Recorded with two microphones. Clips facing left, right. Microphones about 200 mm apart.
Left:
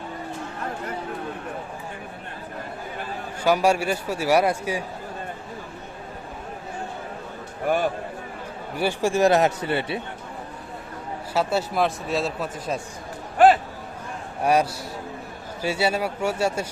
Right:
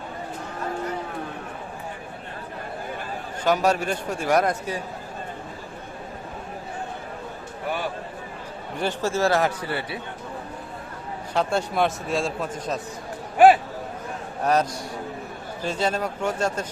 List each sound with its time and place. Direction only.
3.4 s a man's voice: 10° left (ahead or behind)
7.7 s a man's voice: 50° left (ahead or behind)
8.8 s speech: 10° left (ahead or behind)
11.3 s speech: 5° left (ahead or behind)
14.4 s a man's voice: 10° left (ahead or behind)